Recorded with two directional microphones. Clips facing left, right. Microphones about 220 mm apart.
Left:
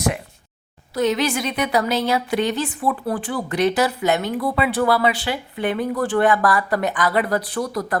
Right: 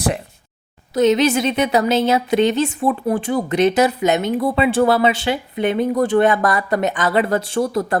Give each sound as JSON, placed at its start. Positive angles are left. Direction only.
{"t": 0.9, "sound": "speech", "side_deg": -20}